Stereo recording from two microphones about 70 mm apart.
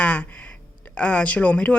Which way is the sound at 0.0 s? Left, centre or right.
Centre.